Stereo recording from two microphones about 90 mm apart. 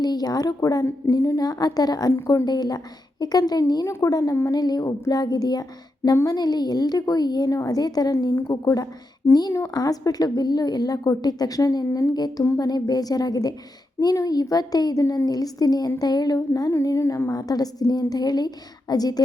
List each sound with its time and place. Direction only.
0.0 s a woman's voice: 50° left (ahead or behind)
16.7 s a woman's voice: 35° left (ahead or behind)